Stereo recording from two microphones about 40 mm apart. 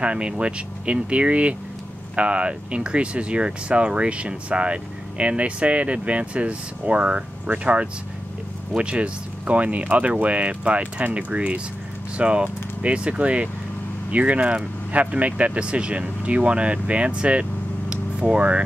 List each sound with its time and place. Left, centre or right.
0.0 s speech: right